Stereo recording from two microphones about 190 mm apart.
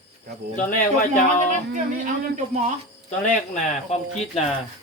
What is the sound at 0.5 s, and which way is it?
Speech, 45° left (ahead or behind).